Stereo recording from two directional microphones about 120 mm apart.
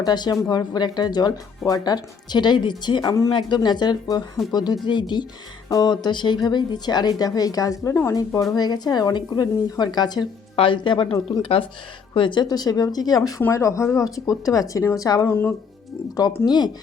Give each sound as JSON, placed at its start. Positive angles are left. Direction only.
{"t": 0.0, "sound": "speech", "side_deg": 35}
{"t": 12.1, "sound": "speech", "side_deg": 40}
{"t": 16.5, "sound": "speech", "side_deg": 35}